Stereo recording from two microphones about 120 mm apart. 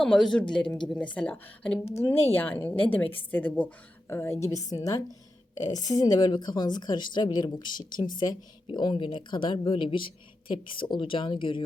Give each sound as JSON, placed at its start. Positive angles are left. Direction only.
{"t": 0.0, "sound": "a woman's voice", "side_deg": 5}